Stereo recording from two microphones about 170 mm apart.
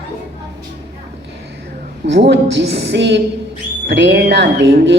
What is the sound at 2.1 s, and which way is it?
A man's voice, 85° right.